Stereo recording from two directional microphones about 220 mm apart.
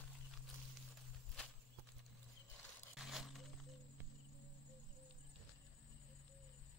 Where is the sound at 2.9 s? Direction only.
Centre (ahead or behind).